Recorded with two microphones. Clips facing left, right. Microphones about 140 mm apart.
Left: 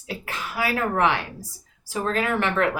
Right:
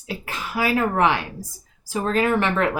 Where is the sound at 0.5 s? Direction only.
20° right (ahead or behind).